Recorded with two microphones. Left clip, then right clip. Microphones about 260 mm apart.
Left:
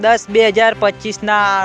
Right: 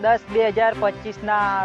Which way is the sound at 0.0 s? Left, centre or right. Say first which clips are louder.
Left 7 dB; left.